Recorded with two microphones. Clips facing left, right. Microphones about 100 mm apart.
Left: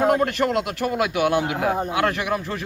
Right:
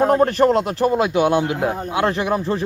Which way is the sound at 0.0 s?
35° right (ahead or behind).